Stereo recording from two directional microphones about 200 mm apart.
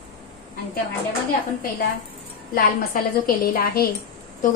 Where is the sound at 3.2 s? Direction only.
45° left (ahead or behind).